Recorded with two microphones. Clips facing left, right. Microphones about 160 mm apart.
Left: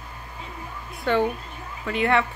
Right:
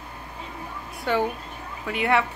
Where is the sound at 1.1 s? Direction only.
10° right (ahead or behind).